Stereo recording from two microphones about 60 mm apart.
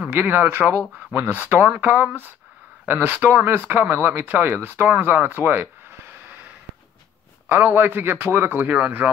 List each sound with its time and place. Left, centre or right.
0.1 s a man's voice: right
5.0 s a sound: right
7.4 s a man's voice: right